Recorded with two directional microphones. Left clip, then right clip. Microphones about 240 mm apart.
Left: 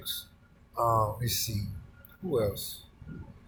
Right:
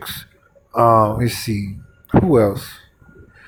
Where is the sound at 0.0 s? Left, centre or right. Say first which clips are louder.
Right 7 dB; right.